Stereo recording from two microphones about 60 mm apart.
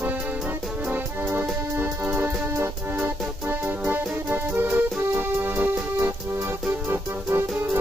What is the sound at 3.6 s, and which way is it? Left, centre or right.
Music, right.